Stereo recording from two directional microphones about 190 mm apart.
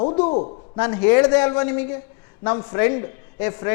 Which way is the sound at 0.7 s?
10° left (ahead or behind).